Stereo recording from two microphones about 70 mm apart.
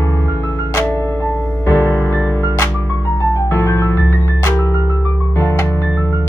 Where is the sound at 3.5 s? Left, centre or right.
Left.